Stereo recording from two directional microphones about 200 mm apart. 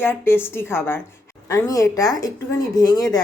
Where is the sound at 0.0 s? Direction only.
10° left (ahead or behind).